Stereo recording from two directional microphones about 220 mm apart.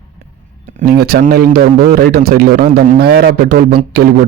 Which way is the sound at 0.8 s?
45° right (ahead or behind).